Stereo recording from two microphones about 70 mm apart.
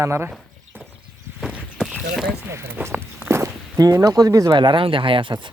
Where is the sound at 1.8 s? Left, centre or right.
Centre.